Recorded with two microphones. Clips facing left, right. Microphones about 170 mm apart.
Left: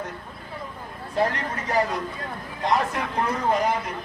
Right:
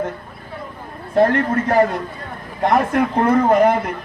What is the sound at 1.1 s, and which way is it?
A man's voice, 55° right (ahead or behind).